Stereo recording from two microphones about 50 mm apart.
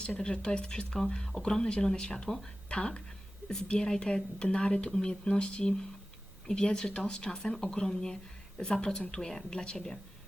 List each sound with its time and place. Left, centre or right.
0.2 s speech: centre
2.6 s speech: centre